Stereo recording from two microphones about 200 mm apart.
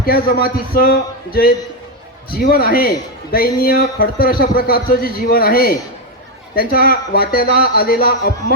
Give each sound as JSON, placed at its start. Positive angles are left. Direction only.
{"t": 0.0, "sound": "a man's voice", "side_deg": 50}